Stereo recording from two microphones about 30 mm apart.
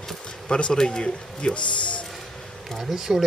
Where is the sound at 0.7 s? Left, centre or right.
Left.